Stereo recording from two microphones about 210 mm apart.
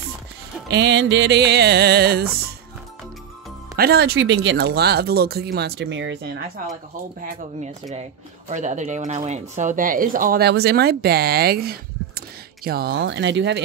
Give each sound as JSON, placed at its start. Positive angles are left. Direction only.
{"t": 0.7, "sound": "speech", "side_deg": -55}
{"t": 3.7, "sound": "speech", "side_deg": -50}
{"t": 7.2, "sound": "a woman's voice", "side_deg": -35}
{"t": 12.9, "sound": "speech", "side_deg": -60}